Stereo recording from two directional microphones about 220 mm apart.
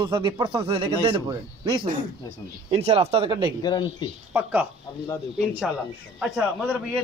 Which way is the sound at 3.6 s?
20° left (ahead or behind).